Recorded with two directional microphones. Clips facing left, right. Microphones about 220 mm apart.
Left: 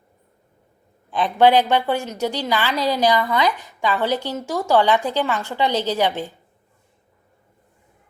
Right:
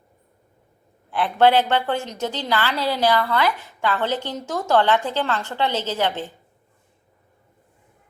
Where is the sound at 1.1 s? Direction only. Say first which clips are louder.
Left 2 dB; 15° left (ahead or behind).